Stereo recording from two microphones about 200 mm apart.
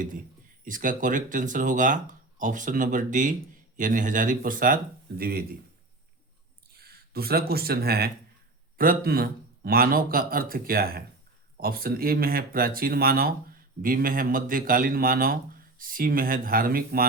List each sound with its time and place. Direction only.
0.6 s speech: 40° right (ahead or behind)
6.7 s speech: 50° right (ahead or behind)